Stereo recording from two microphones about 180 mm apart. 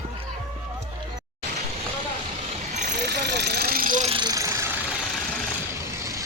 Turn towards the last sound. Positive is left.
turn(degrees=-15)  # may be behind; listen again after turning